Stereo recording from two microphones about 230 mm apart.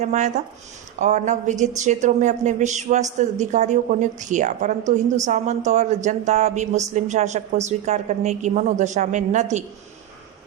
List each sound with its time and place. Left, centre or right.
0.0 s speech: right